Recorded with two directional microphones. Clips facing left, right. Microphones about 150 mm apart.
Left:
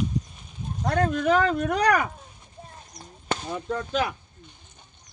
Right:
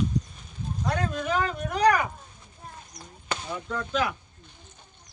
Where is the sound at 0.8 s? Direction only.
50° left (ahead or behind).